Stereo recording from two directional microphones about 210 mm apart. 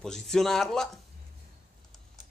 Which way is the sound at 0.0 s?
Centre (ahead or behind).